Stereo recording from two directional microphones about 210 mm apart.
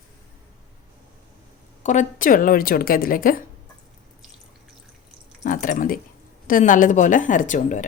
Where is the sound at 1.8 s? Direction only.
35° left (ahead or behind).